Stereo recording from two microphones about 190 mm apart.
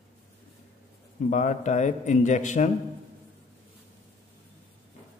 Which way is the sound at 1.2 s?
40° left (ahead or behind).